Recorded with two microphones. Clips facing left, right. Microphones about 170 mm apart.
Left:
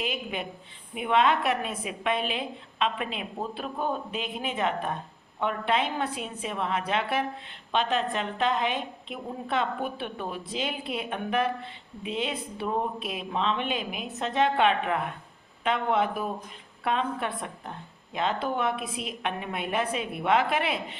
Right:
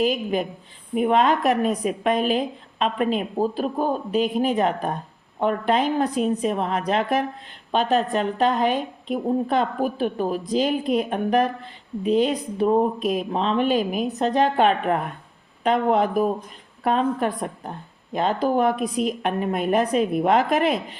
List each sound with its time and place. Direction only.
0.0 s a woman's voice: 40° right (ahead or behind)